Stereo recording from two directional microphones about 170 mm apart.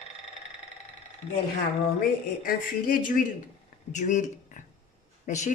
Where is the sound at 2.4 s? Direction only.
55° left (ahead or behind).